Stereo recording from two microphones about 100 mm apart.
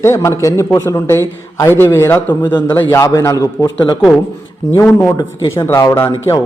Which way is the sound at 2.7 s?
30° left (ahead or behind).